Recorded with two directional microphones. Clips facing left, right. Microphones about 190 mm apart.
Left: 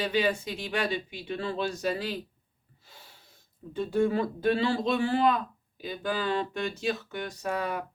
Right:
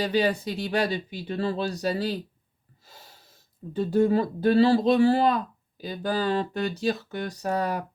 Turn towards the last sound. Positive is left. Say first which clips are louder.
# right 4 dB
turn(degrees=-40)  # may be behind; listen again after turning